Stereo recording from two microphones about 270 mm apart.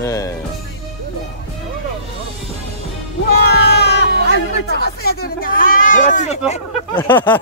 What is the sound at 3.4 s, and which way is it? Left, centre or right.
Cat, left.